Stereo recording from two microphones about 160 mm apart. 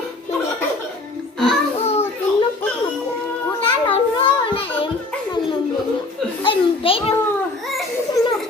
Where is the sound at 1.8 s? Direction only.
40° left (ahead or behind).